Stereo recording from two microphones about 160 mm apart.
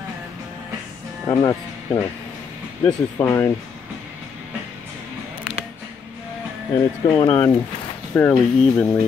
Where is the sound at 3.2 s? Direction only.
15° left (ahead or behind).